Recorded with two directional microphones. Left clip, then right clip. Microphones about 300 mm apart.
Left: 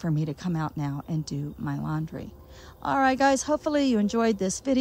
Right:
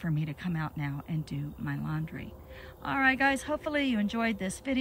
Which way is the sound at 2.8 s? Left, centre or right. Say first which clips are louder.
Left 4 dB; centre.